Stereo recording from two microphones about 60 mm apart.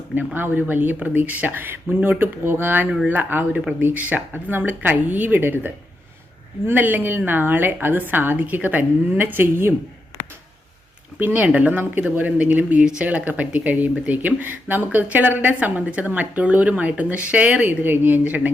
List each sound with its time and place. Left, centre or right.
0.3 s a woman's voice: right
11.2 s speech: right